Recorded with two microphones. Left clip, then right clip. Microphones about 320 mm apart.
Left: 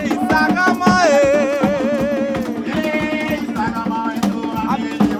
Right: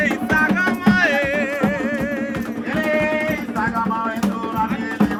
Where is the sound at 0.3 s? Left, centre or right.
Centre.